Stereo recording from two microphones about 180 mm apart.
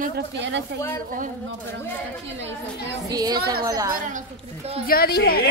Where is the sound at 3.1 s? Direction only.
20° right (ahead or behind).